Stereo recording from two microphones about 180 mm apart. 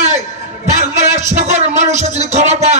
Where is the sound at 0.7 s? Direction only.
40° right (ahead or behind).